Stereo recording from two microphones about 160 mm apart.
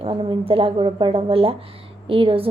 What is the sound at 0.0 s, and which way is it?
A woman's voice, 30° right (ahead or behind).